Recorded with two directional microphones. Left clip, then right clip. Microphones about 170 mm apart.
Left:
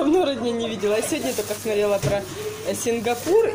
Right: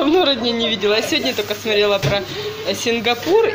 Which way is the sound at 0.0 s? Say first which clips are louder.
Right 5 dB; 10° left (ahead or behind).